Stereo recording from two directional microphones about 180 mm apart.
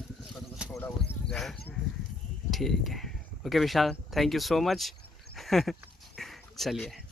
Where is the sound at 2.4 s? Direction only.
Centre (ahead or behind).